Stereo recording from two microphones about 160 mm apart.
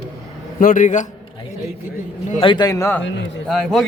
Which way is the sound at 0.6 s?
55° left (ahead or behind).